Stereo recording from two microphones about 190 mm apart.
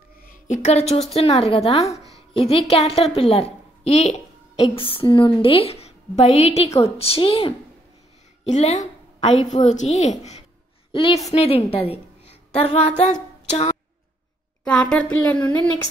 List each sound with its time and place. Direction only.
0.2 s a woman's voice: 45° left (ahead or behind)
2.3 s music: 30° left (ahead or behind)
2.7 s a woman's voice: 30° left (ahead or behind)
14.6 s a woman's voice: 5° left (ahead or behind)